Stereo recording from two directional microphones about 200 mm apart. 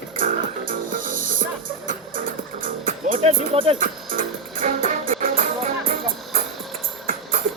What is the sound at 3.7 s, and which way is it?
Music, 45° right (ahead or behind).